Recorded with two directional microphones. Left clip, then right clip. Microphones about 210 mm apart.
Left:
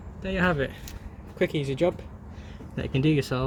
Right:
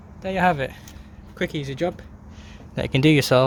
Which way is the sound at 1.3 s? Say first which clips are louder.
Left 1 dB; 30° right (ahead or behind).